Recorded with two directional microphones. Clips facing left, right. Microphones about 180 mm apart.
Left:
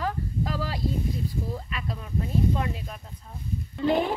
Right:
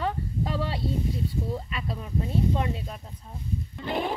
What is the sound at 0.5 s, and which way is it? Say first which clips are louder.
Speech: even; 30° right (ahead or behind).